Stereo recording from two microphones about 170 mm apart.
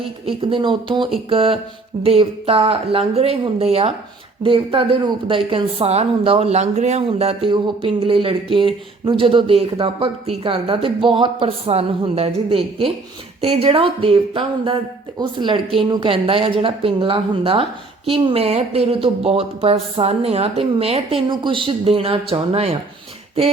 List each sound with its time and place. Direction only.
0.3 s a woman's voice: 30° right (ahead or behind)